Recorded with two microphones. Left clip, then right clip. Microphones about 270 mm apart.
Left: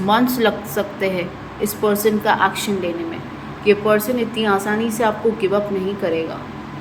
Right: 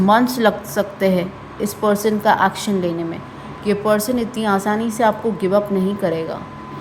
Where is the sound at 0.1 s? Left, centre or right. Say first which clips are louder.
Right 1 dB; right.